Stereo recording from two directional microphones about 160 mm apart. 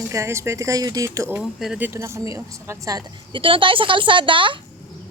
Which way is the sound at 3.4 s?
35° right (ahead or behind).